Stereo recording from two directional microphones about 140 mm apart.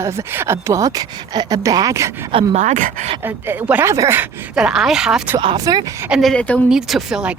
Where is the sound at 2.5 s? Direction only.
60° right (ahead or behind).